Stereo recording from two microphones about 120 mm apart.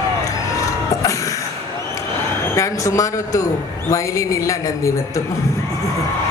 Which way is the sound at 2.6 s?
25° left (ahead or behind).